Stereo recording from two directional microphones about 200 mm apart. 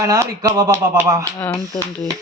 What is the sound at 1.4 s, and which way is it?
Speech, 10° left (ahead or behind).